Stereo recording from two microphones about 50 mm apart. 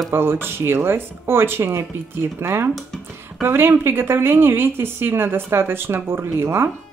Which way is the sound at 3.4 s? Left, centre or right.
Right.